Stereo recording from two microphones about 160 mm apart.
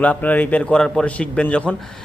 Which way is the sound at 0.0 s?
10° left (ahead or behind).